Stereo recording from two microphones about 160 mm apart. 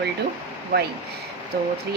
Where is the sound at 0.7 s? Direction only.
70° right (ahead or behind).